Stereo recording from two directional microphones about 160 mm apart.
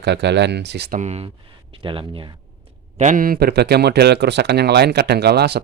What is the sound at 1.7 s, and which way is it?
Speech, 35° right (ahead or behind).